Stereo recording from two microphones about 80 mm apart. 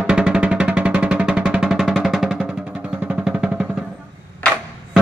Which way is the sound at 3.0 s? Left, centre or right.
Centre.